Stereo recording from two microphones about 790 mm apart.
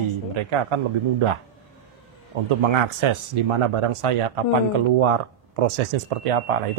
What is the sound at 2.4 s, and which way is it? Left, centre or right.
Speech, right.